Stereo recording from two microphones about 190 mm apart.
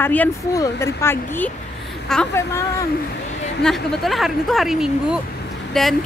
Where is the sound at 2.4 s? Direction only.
15° left (ahead or behind).